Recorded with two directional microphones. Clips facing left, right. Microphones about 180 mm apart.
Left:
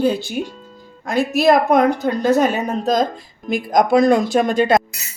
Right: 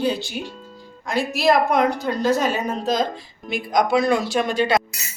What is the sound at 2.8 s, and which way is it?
A woman's voice, 45° left (ahead or behind).